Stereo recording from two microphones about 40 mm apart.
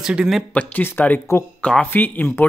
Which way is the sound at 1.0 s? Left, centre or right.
Left.